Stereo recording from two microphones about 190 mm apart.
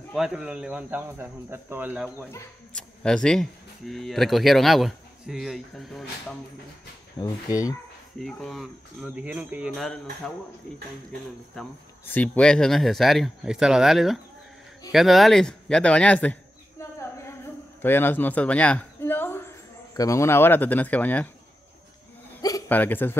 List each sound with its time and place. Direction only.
0.1 s speech: 5° right (ahead or behind)
2.3 s speech: 5° left (ahead or behind)
7.2 s speech: 20° left (ahead or behind)
8.2 s speech: centre (ahead or behind)
11.6 s speech: centre (ahead or behind)
17.8 s speech: 10° left (ahead or behind)
22.4 s hiccup: 15° left (ahead or behind)